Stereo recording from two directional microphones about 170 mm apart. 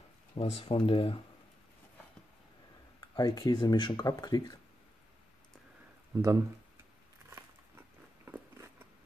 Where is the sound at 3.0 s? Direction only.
25° left (ahead or behind).